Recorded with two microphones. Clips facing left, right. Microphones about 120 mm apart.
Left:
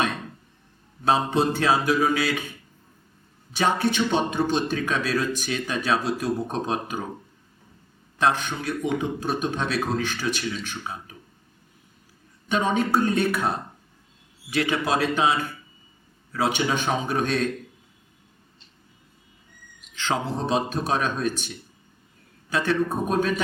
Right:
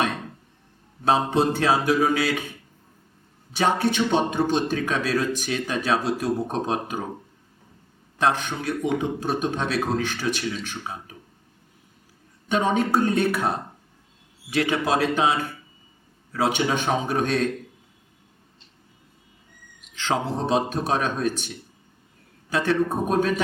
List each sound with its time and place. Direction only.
0.0 s chink: 40° right (ahead or behind)
1.0 s speech: 45° right (ahead or behind)
5.3 s speech: 55° right (ahead or behind)
8.2 s speech: 50° right (ahead or behind)
12.5 s speech: 50° right (ahead or behind)
16.5 s speech: 60° right (ahead or behind); by 17.7 s 45° right (ahead or behind)
19.9 s speech: 45° right (ahead or behind)
21.3 s speech: 60° right (ahead or behind)
22.4 s speech: 50° right (ahead or behind)